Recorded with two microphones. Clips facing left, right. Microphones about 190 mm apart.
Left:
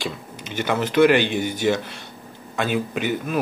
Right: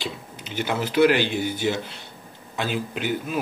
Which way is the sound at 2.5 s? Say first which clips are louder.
Left 4 dB; 55° left (ahead or behind).